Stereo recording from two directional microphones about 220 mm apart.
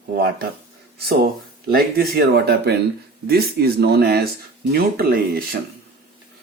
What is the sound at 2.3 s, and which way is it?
Speech, 50° right (ahead or behind).